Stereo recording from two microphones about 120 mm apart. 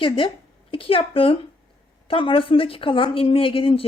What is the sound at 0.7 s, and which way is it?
A woman's voice, 45° left (ahead or behind).